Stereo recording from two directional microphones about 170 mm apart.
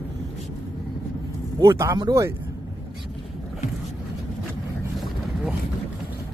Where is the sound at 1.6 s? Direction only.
15° right (ahead or behind).